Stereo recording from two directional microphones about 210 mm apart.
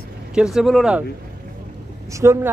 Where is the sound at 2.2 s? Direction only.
15° right (ahead or behind).